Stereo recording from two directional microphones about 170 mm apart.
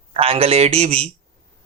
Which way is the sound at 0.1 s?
35° right (ahead or behind).